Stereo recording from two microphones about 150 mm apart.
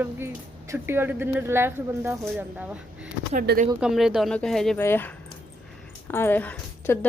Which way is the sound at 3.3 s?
75° right (ahead or behind).